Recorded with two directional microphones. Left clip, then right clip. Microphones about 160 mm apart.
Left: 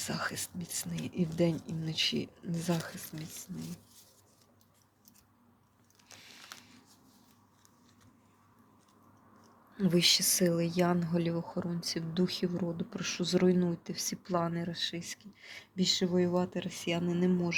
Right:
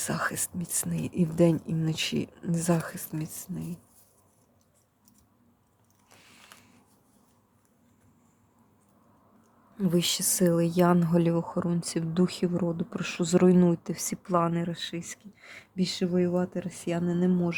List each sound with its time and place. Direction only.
0.0 s speech: 35° right (ahead or behind)
9.7 s a woman's voice: 15° right (ahead or behind)
10.0 s speech: 30° right (ahead or behind); by 17.5 s 45° right (ahead or behind)